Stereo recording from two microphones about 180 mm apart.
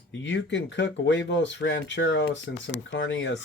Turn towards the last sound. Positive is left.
turn(degrees=90)